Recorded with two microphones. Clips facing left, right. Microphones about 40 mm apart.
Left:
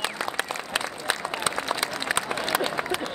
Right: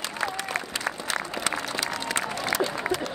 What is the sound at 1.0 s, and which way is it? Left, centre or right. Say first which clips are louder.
Applause: left 2 dB; left.